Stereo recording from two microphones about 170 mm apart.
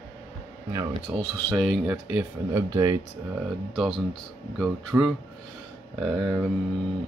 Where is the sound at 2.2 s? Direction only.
20° right (ahead or behind).